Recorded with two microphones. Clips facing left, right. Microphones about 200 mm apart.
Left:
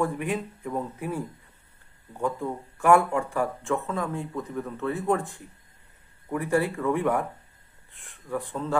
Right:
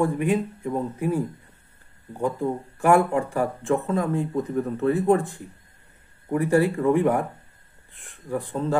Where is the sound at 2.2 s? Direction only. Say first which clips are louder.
Right 4 dB; 30° right (ahead or behind).